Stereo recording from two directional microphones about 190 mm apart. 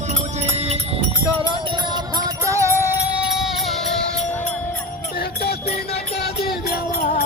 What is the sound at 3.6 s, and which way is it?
Music, centre (ahead or behind).